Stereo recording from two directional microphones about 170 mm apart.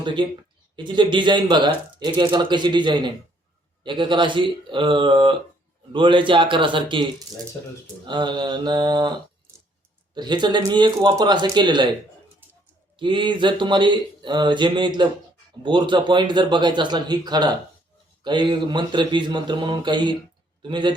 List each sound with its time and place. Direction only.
0.0 s speech: 30° right (ahead or behind)
10.2 s speech: 25° right (ahead or behind)
13.0 s a man's voice: 30° right (ahead or behind)